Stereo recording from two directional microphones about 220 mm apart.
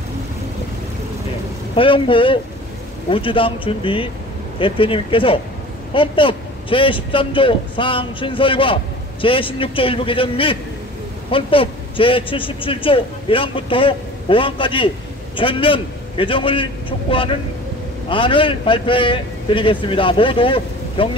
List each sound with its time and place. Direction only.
1.8 s a man's voice: 25° left (ahead or behind)